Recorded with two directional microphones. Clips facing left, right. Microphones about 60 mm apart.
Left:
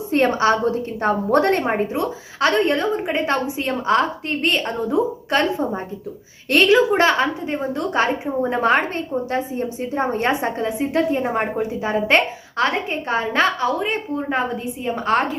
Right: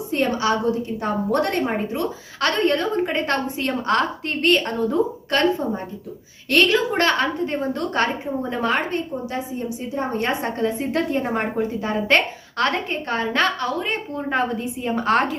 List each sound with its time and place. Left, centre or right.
0.1 s a woman's voice: left; by 4.9 s centre
5.3 s a woman's voice: left
8.5 s a woman's voice: left
10.6 s a woman's voice: centre